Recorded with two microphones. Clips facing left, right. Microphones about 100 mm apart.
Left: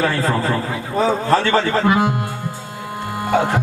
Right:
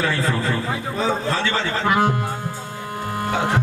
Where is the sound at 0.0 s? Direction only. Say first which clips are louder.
Left 3 dB; 45° left (ahead or behind).